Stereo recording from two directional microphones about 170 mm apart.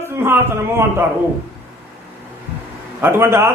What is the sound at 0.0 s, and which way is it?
Speech, 15° right (ahead or behind).